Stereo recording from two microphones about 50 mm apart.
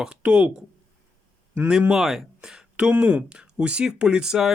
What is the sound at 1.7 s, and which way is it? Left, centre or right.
Speech, centre.